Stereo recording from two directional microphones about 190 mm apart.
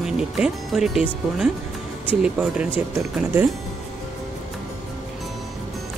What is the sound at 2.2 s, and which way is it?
Speech, 5° right (ahead or behind).